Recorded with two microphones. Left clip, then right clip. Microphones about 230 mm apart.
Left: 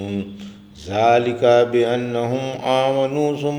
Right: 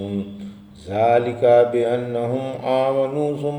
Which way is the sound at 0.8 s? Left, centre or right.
Left.